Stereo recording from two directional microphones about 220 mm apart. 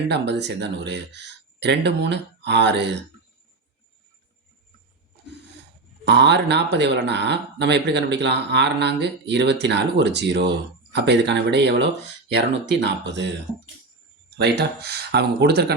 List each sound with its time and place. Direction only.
0.1 s speech: 50° right (ahead or behind)
6.1 s speech: 50° right (ahead or behind)
14.3 s speech: 50° right (ahead or behind)